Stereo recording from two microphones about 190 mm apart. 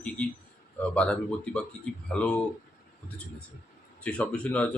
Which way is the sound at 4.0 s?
5° left (ahead or behind).